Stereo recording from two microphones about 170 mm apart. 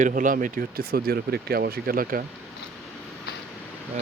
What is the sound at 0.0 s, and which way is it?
Speech, 50° right (ahead or behind).